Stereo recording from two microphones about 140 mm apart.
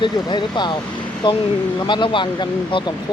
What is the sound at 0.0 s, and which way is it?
Speech, 35° left (ahead or behind).